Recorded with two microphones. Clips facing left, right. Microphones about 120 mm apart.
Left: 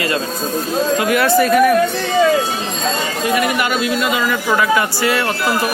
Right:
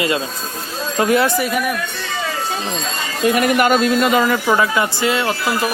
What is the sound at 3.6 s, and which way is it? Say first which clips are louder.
Speech: right 4 dB; 45° right (ahead or behind).